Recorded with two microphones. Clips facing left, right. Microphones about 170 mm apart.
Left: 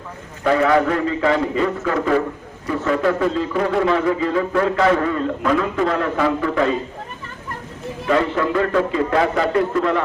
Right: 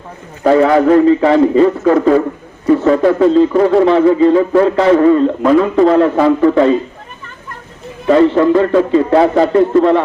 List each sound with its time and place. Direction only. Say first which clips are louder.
0.4 s a man's voice: right 7 dB; 30° right (ahead or behind)
8.0 s a man's voice: right 10 dB; 35° right (ahead or behind)